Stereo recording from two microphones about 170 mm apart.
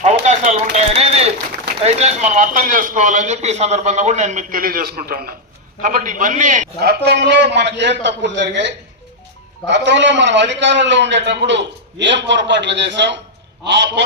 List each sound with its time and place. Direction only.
0.0 s a sound: 40° right (ahead or behind)
1.8 s speech: 40° right (ahead or behind)
6.8 s a man's voice: 85° right